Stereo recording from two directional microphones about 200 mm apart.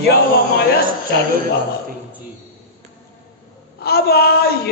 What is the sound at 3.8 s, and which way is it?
Speech, 50° left (ahead or behind).